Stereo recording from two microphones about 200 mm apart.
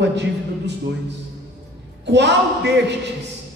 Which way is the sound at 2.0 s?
60° right (ahead or behind).